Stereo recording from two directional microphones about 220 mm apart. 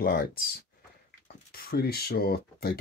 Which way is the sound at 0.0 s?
40° left (ahead or behind).